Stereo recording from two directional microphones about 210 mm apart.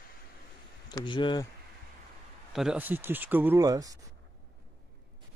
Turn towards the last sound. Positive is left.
turn(degrees=-15)  # may be behind; listen again after turning